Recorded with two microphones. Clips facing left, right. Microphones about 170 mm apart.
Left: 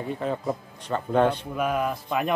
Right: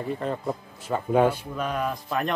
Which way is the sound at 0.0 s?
Centre (ahead or behind).